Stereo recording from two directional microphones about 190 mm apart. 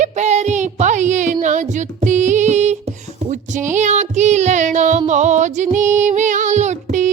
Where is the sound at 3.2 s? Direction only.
40° right (ahead or behind).